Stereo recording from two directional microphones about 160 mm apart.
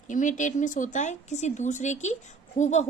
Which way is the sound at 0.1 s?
55° left (ahead or behind).